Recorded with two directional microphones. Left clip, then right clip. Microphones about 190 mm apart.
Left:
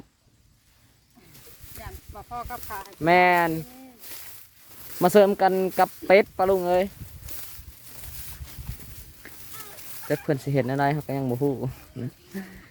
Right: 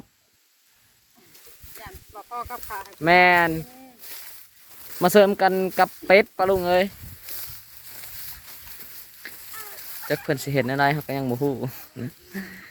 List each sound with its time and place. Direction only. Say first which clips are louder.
2.1 s speech: right 2 dB; 40° left (ahead or behind)
3.0 s speech: right 2 dB; 10° left (ahead or behind)
4.0 s a sound: right 3 dB; 5° right (ahead or behind)
4.9 s speech: right 1 dB; 10° left (ahead or behind)
9.2 s a sound: right 6 dB; 20° left (ahead or behind)
10.1 s speech: right 1 dB; 15° left (ahead or behind)